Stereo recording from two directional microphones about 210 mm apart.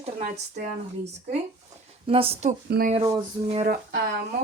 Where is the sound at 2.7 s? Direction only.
45° right (ahead or behind).